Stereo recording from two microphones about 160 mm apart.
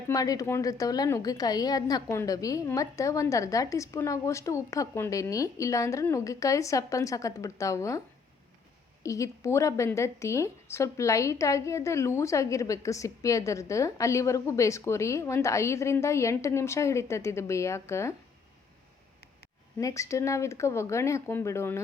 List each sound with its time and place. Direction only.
0.1 s a woman's voice: 20° left (ahead or behind)
9.0 s a woman's voice: 20° left (ahead or behind)
19.8 s a woman's voice: 20° left (ahead or behind)